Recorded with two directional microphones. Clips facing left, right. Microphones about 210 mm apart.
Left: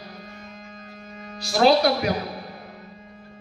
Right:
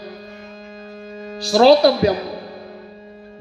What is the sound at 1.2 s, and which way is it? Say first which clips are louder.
Speech: right 6 dB; 30° right (ahead or behind).